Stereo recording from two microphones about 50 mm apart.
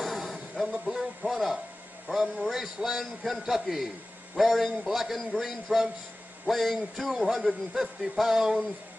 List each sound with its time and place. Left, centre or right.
0.0 s music: centre
2.0 s a man's voice: centre